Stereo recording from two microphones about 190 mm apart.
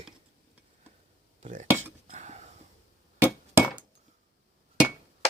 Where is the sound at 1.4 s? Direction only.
40° right (ahead or behind).